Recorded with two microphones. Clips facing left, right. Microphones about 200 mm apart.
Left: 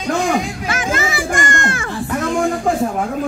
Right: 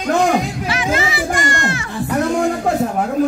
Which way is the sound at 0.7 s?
45° left (ahead or behind).